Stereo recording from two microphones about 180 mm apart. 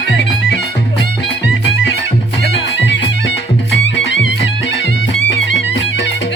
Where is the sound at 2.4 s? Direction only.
80° left.